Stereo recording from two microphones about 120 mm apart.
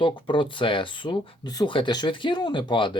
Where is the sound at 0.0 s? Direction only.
45° left (ahead or behind).